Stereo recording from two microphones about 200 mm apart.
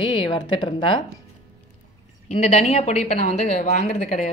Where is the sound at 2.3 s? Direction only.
30° left (ahead or behind).